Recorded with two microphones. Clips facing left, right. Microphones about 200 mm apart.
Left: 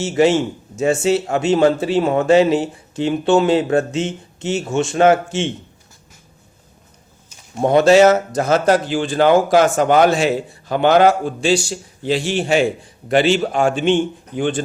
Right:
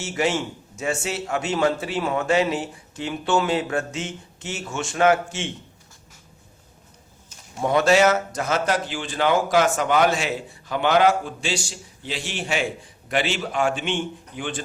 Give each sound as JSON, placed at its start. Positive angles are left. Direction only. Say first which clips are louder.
{"t": 0.0, "sound": "a man's voice", "louder": "left 9 dB", "side_deg": 25}
{"t": 7.6, "sound": "speech", "louder": "left 7 dB", "side_deg": 25}